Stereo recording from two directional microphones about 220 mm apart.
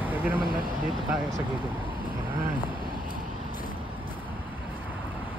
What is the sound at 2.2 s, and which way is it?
Vehicle, 10° right (ahead or behind).